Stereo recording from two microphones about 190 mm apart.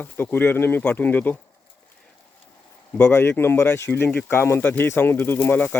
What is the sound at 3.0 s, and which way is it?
Speech, 10° left (ahead or behind).